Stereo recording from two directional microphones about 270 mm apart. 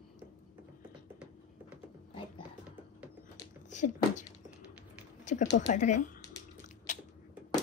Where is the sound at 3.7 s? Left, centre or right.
Left.